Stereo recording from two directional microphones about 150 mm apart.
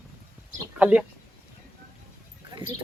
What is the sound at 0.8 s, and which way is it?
Speech, 10° right (ahead or behind).